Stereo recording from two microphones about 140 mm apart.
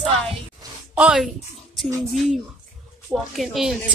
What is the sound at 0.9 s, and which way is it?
A woman's voice, 5° right (ahead or behind).